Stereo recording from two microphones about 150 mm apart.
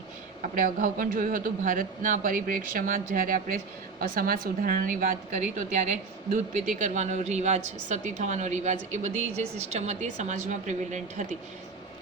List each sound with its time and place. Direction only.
0.4 s a woman's voice: 60° right (ahead or behind)